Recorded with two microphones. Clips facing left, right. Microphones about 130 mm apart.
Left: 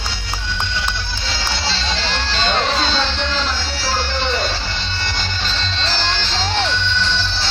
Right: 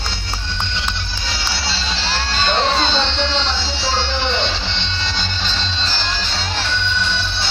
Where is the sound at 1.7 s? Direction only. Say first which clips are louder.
Left 1 dB; 5° right (ahead or behind).